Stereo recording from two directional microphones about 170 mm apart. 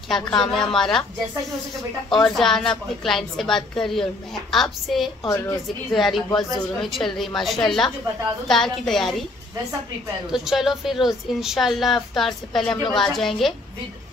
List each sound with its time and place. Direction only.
0.1 s speech: 5° left (ahead or behind)
2.1 s speech: centre (ahead or behind)
5.2 s a woman's voice: 20° left (ahead or behind)
5.9 s speech: centre (ahead or behind)
10.3 s speech: centre (ahead or behind)